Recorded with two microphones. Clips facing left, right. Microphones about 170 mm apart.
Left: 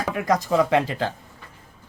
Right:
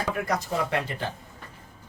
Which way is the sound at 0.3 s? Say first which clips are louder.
Left 7 dB; 90° left.